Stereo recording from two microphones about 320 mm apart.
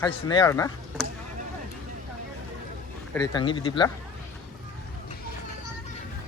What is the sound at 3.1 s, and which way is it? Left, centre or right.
Speech, centre.